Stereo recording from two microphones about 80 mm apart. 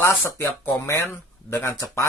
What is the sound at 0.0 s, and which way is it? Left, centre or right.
Speech, left.